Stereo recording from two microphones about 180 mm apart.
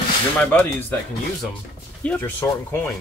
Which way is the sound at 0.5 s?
10° left (ahead or behind).